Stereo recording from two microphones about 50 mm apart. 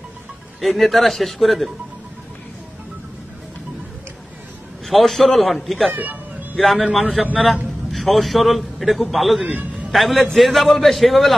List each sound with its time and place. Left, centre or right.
0.6 s a man's voice: centre
4.8 s a man's voice: centre
9.4 s a man's voice: centre
9.8 s a man's voice: centre